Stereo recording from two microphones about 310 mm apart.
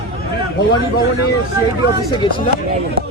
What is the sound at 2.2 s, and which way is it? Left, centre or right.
Speech, centre.